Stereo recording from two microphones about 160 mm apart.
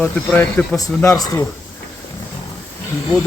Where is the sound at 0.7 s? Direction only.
20° left (ahead or behind).